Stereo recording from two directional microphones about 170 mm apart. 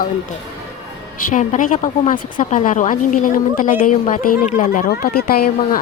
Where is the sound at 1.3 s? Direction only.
45° left (ahead or behind).